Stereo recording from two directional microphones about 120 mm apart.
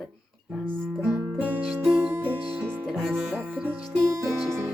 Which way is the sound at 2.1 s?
15° right (ahead or behind).